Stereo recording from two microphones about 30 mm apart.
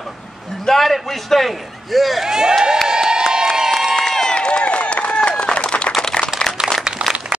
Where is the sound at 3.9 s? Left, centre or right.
Left.